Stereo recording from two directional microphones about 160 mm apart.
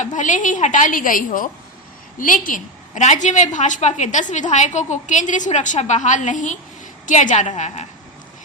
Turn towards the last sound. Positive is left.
turn(degrees=50)  # may be behind; listen again after turning